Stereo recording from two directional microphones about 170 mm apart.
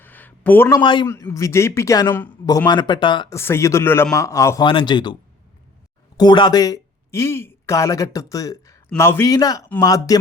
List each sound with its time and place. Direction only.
0.0 s a sound: 10° left (ahead or behind)
0.8 s a man's voice: 30° left (ahead or behind)
1.0 s a man's voice: 15° left (ahead or behind)
2.1 s speech: 10° left (ahead or behind)
2.6 s a man's voice: 25° left (ahead or behind)
3.3 s a man's voice: 15° left (ahead or behind)
6.1 s a man's voice: 25° left (ahead or behind)